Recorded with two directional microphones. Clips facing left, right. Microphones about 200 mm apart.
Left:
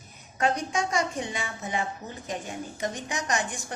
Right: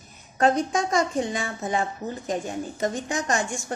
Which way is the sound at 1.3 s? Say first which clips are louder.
Right 5 dB; 40° right (ahead or behind).